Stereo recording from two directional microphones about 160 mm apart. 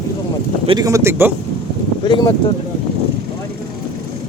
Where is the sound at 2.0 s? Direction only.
30° left (ahead or behind).